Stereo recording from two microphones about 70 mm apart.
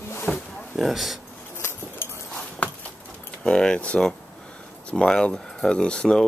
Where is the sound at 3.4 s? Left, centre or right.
Centre.